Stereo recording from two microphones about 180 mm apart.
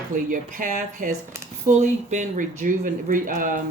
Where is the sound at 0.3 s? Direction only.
45° right (ahead or behind).